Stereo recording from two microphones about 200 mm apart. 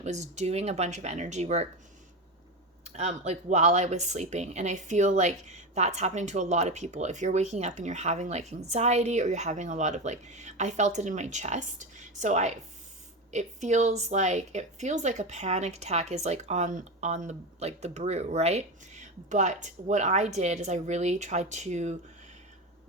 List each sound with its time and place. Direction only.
0.0 s speech: 35° right (ahead or behind)
2.8 s speech: 35° right (ahead or behind)